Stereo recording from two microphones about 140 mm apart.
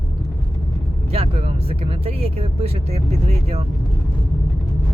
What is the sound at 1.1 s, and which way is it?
Speech, 45° right (ahead or behind).